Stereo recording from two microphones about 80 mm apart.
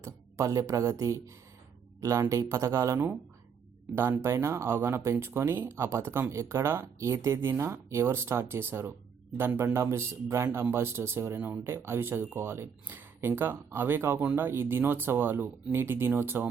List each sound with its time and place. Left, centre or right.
0.0 s speech: right